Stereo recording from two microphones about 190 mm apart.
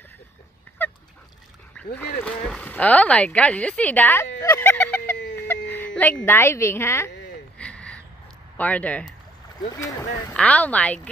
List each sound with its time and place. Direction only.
0.7 s dog: 10° left (ahead or behind)
2.4 s a sound: 5° left (ahead or behind)
5.5 s speech: 10° left (ahead or behind)
7.5 s a sound: 5° left (ahead or behind)
8.5 s speech: 5° left (ahead or behind)
9.8 s speech: 20° left (ahead or behind)
10.3 s speech: 5° left (ahead or behind)